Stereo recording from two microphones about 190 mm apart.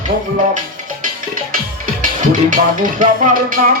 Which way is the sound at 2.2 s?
45° right (ahead or behind).